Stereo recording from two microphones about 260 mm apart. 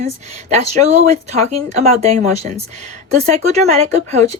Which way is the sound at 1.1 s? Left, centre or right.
Right.